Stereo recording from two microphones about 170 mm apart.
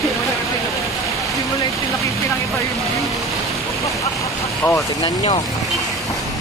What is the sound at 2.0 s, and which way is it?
Vehicle, 20° left (ahead or behind).